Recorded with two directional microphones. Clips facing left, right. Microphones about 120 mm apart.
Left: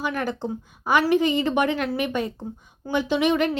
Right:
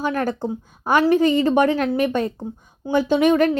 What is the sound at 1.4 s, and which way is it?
A woman's voice, 40° right (ahead or behind).